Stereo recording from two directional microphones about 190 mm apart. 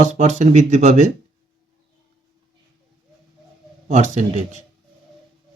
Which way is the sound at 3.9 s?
40° right (ahead or behind).